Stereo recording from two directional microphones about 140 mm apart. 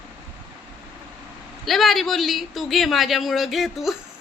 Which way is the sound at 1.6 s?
Centre (ahead or behind).